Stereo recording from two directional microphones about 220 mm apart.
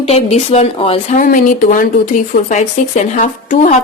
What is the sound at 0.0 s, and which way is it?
Speech, 30° left (ahead or behind).